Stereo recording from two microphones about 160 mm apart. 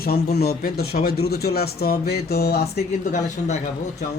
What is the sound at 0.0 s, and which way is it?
Speech, 75° left (ahead or behind).